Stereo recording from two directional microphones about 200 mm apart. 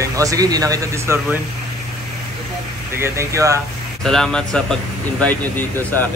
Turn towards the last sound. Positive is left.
turn(degrees=10)  # may be behind; listen again after turning